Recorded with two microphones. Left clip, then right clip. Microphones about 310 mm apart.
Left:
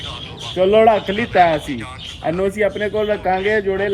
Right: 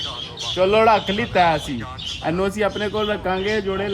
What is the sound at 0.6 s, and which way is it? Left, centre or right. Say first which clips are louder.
Speech: left 4 dB; left.